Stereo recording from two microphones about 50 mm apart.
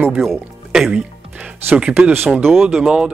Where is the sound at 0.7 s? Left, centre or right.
Centre.